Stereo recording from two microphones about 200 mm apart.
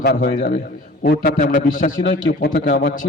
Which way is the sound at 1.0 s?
50° left (ahead or behind).